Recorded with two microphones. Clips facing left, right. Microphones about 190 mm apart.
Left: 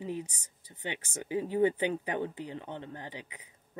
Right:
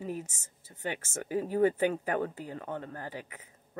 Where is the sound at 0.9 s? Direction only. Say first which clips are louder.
Right 2 dB; 20° left (ahead or behind).